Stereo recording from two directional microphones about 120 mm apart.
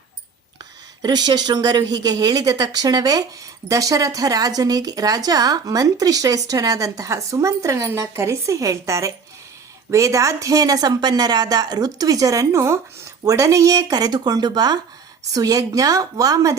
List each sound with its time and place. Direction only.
0.6 s speech: 35° right (ahead or behind)